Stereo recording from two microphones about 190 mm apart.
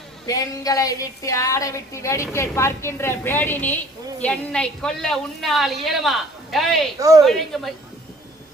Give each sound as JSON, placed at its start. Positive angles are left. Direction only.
{"t": 0.3, "sound": "a woman's voice", "side_deg": 20}